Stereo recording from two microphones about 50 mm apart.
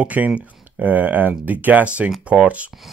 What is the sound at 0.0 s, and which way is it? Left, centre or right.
Speech, right.